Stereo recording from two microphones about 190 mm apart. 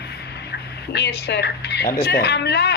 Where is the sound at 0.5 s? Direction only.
60° left (ahead or behind).